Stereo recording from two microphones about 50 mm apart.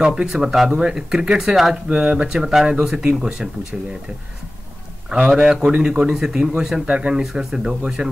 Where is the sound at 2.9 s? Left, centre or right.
Centre.